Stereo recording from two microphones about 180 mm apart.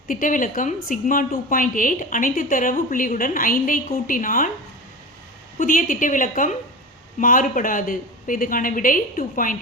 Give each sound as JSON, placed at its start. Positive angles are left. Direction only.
{"t": 0.1, "sound": "a woman's voice", "side_deg": 50}
{"t": 5.5, "sound": "a woman's voice", "side_deg": 50}